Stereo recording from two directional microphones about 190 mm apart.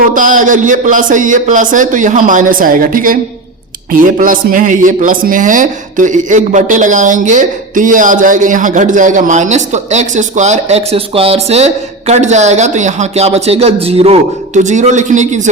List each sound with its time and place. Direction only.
0.1 s a man's voice: 45° right (ahead or behind)